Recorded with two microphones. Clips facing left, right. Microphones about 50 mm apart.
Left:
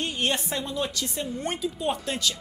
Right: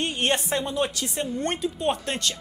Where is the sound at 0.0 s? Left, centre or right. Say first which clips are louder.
Right 3 dB; right.